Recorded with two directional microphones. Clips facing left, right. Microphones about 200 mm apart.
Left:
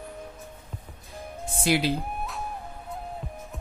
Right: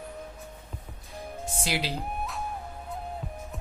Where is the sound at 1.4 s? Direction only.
55° left (ahead or behind).